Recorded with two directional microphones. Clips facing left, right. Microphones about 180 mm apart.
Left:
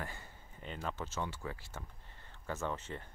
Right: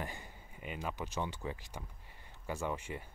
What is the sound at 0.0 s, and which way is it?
Speech, 15° right (ahead or behind).